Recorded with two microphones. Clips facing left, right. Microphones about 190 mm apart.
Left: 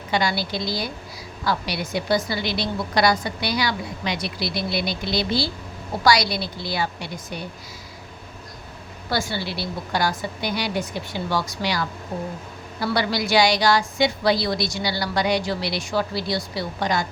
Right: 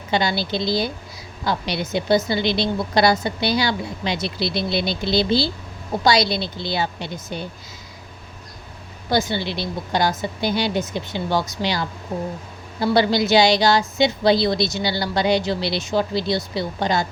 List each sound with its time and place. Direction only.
0.1 s a woman's voice: 25° right (ahead or behind)
9.0 s a woman's voice: 20° right (ahead or behind)